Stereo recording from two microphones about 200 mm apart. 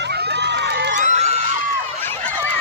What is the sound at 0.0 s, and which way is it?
Crowd, 55° right (ahead or behind).